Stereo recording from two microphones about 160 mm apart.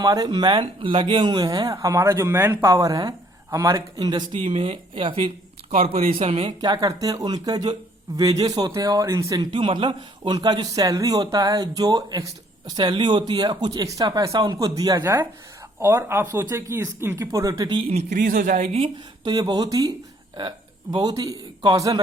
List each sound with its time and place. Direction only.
0.0 s a man's voice: 25° right (ahead or behind)
6.6 s a man's voice: 25° right (ahead or behind)
17.6 s a man's voice: 30° right (ahead or behind)
17.9 s a man's voice: 55° right (ahead or behind); by 22.0 s 25° right (ahead or behind)